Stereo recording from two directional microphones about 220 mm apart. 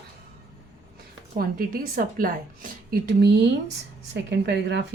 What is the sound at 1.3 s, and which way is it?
A woman's voice, 40° right (ahead or behind).